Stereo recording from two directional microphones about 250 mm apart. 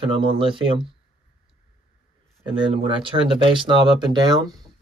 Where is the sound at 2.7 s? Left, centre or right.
Right.